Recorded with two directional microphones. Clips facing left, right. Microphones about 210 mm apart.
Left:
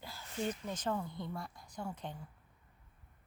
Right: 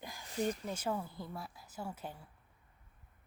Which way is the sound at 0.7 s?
10° right (ahead or behind).